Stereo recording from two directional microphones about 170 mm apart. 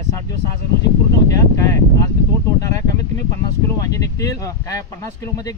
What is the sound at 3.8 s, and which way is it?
A man's voice, 20° left (ahead or behind).